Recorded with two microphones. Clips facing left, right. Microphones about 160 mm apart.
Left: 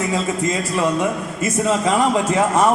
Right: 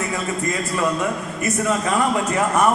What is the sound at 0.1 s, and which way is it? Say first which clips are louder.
A man's voice: left 4 dB; 20° left (ahead or behind).